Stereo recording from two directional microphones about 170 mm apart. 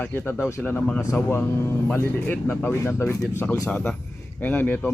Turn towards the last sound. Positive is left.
turn(degrees=10)  # may be behind; listen again after turning